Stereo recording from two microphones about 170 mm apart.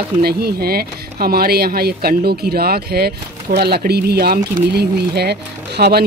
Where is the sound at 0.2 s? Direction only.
65° right (ahead or behind).